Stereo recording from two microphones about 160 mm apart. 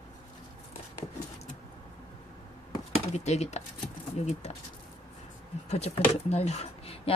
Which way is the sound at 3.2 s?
45° left (ahead or behind).